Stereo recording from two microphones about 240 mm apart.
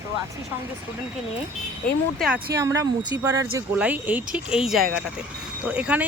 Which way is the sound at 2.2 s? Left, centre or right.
Centre.